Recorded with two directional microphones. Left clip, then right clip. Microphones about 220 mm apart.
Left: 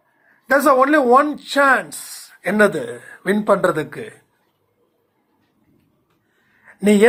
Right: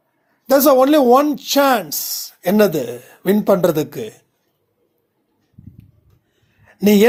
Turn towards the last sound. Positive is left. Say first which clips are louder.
# right 1 dB
turn(degrees=-50)  # may be behind; listen again after turning